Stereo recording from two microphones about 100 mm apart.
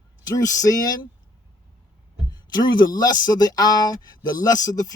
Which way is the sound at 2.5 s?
45° left (ahead or behind).